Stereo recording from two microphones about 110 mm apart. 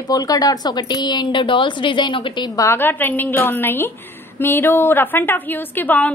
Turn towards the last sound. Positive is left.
turn(degrees=15)  # may be behind; listen again after turning